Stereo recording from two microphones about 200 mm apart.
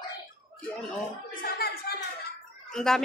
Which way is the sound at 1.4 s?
50° left (ahead or behind).